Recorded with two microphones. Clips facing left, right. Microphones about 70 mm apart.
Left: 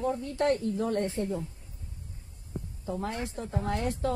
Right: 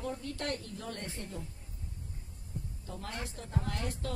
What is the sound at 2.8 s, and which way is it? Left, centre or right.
Speech, left.